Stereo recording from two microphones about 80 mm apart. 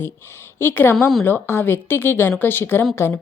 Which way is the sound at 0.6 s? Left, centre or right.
Left.